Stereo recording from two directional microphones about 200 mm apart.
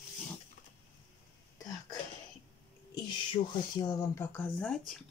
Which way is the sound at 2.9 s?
25° left (ahead or behind).